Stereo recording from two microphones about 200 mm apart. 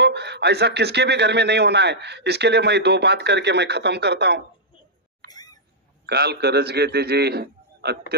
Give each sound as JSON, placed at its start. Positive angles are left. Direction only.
{"t": 0.0, "sound": "speech", "side_deg": -55}
{"t": 5.3, "sound": "a sound", "side_deg": 20}
{"t": 6.0, "sound": "speech", "side_deg": -55}